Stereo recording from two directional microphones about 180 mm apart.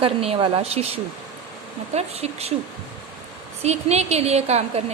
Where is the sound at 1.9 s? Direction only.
35° right (ahead or behind).